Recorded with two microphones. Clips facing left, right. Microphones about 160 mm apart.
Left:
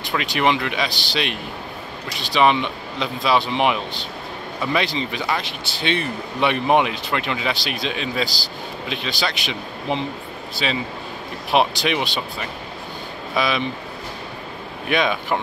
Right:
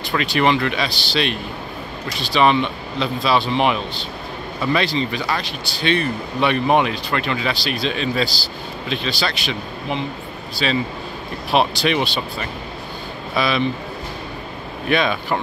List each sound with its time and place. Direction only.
0.1 s speech: 10° left (ahead or behind)
14.9 s speech: 15° left (ahead or behind)